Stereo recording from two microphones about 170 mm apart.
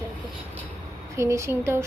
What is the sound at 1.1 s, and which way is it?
Speech, 15° right (ahead or behind).